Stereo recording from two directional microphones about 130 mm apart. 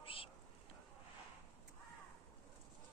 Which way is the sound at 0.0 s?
45° left (ahead or behind).